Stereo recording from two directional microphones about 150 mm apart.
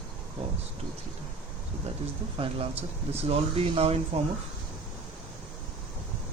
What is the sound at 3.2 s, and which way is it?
Speech, 40° right (ahead or behind).